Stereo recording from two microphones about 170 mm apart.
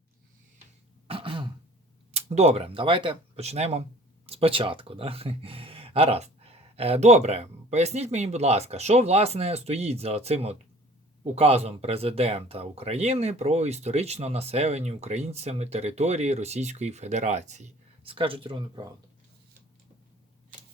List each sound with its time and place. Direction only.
1.0 s throat clearing: 30° right (ahead or behind)
2.1 s speech: 40° right (ahead or behind)